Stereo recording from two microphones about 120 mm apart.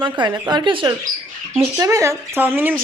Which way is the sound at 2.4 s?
15° right (ahead or behind).